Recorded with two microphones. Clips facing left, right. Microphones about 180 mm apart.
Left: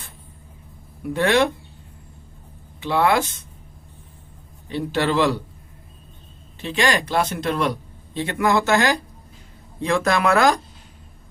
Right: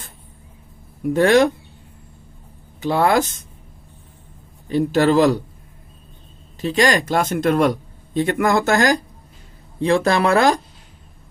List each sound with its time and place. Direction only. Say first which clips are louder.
1.0 s speech: right 5 dB; 45° right (ahead or behind)
2.8 s speech: right 2 dB; 45° right (ahead or behind)
4.7 s speech: right 6 dB; 45° right (ahead or behind)
6.6 s speech: right 4 dB; 40° right (ahead or behind)
9.8 s speech: right 3 dB; 30° right (ahead or behind)